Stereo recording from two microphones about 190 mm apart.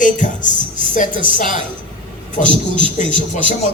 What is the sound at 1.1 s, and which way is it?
Speech, 25° right (ahead or behind).